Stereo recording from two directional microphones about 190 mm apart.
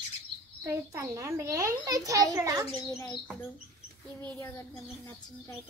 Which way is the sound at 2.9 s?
15° left (ahead or behind).